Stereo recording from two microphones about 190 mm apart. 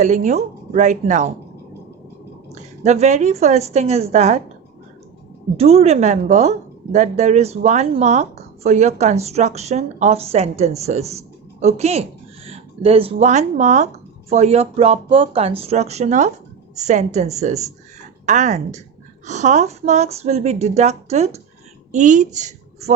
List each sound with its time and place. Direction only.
0.0 s a woman's voice: 40° right (ahead or behind)
2.5 s a woman's voice: 35° right (ahead or behind)
5.5 s a woman's voice: 35° right (ahead or behind)